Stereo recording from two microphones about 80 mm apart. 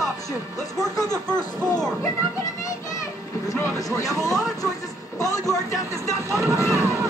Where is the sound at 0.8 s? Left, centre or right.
Left.